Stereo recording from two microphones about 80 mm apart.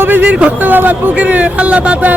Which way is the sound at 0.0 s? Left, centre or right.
Right.